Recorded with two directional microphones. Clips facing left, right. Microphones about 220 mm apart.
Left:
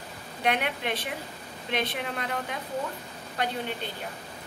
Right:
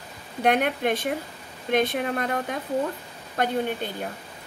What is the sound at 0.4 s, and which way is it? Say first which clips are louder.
Speech: right 6 dB; 45° right (ahead or behind).